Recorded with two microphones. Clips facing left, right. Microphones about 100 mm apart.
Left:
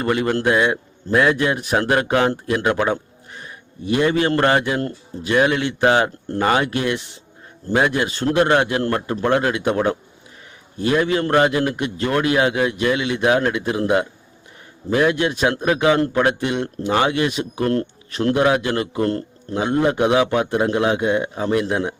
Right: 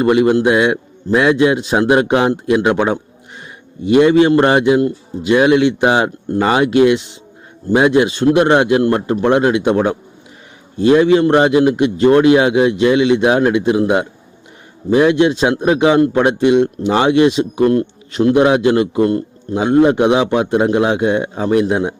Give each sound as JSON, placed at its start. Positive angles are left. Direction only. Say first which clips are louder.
{"t": 0.0, "sound": "a man's voice", "louder": "right 7 dB", "side_deg": -20}